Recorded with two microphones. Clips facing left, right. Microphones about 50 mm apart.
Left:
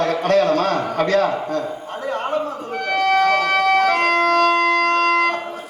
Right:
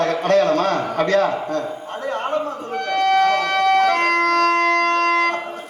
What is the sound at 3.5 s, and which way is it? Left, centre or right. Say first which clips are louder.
Siren: even; centre.